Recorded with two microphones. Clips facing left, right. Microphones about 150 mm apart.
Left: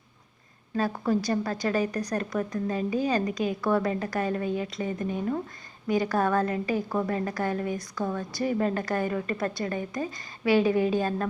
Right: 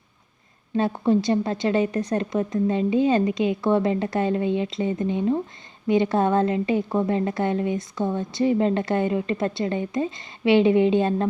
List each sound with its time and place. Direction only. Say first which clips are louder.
0.8 s a woman's voice: right 5 dB; 25° right (ahead or behind)